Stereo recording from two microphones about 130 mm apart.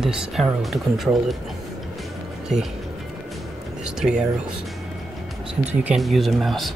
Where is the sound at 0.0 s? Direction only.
5° right (ahead or behind).